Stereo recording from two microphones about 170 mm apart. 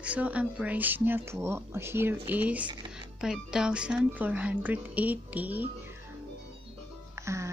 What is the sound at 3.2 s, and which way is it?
Speech, 5° right (ahead or behind).